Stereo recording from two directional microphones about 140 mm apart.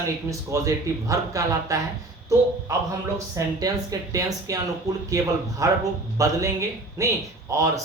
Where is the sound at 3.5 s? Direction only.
25° right (ahead or behind).